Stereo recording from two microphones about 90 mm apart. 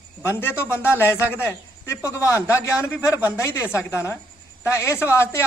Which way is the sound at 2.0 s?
35° left (ahead or behind).